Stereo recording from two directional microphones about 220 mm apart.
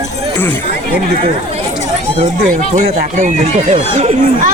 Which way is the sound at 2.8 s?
30° right (ahead or behind).